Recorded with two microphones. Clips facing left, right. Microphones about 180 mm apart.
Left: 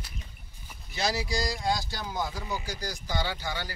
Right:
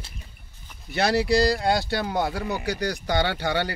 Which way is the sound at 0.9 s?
65° right (ahead or behind).